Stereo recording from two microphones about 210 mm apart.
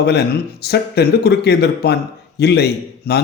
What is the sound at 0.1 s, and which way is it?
Speech, 50° left (ahead or behind).